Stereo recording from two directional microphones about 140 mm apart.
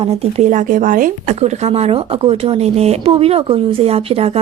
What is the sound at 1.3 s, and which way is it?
Speech, 50° right (ahead or behind).